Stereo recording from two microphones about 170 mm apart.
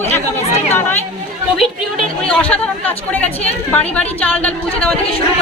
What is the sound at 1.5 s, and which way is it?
Speech, centre (ahead or behind).